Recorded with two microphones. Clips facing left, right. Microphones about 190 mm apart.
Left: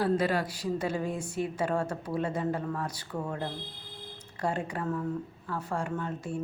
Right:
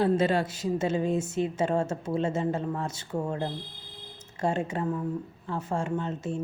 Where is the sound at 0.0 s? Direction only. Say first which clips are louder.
Right 3 dB; 25° right (ahead or behind).